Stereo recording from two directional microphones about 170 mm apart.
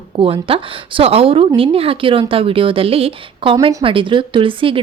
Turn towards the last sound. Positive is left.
turn(degrees=-30)  # may be behind; listen again after turning